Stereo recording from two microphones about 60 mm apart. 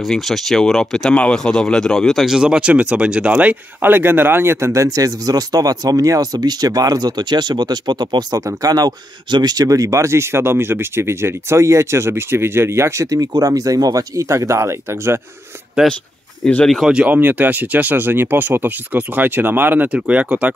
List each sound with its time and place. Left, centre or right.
0.1 s speech: centre
2.2 s speech: centre; by 4.8 s right
4.8 s speech: right
8.6 s speech: right
9.6 s speech: right
14.3 s speech: right
15.8 s speech: centre
16.8 s speech: centre
17.1 s speech: right